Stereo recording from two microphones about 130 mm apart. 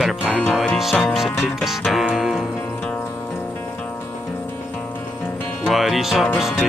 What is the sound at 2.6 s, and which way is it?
Music, 10° left (ahead or behind).